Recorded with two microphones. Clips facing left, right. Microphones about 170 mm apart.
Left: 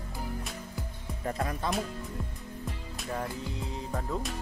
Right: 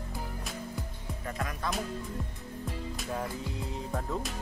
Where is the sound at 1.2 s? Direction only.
35° left (ahead or behind).